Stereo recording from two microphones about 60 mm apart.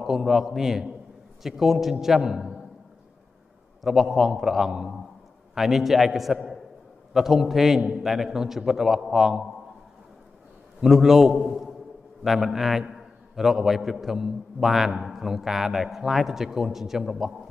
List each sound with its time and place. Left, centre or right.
0.0 s a man's voice: centre
3.8 s a man's voice: centre
10.8 s a man's voice: centre